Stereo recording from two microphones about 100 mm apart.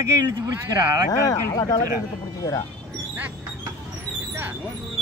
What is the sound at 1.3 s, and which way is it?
Speech, 40° left (ahead or behind).